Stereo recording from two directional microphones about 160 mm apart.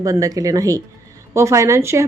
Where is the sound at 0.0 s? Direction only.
20° right (ahead or behind).